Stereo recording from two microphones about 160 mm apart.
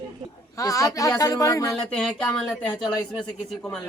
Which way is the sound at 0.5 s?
20° left (ahead or behind).